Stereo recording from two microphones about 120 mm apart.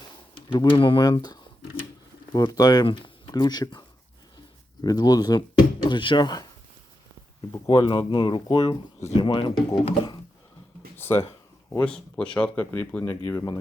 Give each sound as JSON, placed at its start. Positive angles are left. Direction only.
{"t": 0.5, "sound": "speech", "side_deg": 45}
{"t": 2.8, "sound": "speech", "side_deg": 45}
{"t": 7.7, "sound": "speech", "side_deg": 45}
{"t": 10.9, "sound": "a sound", "side_deg": 20}
{"t": 11.8, "sound": "speech", "side_deg": 10}